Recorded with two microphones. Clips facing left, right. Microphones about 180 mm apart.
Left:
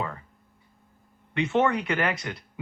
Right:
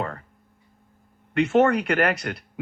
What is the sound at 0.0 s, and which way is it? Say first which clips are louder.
Speech: right 3 dB; 55° right (ahead or behind).